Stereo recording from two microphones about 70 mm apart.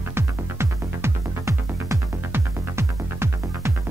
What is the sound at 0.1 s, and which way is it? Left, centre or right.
Music, right.